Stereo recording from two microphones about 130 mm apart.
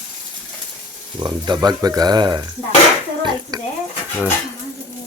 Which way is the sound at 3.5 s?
30° right (ahead or behind).